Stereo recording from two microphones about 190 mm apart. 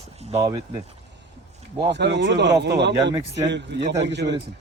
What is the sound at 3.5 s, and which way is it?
Speech, 65° right (ahead or behind).